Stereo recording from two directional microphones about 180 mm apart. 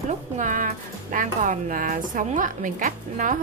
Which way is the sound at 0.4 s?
45° right (ahead or behind).